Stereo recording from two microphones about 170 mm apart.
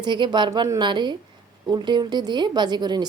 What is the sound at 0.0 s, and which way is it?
A woman's voice, 25° right (ahead or behind).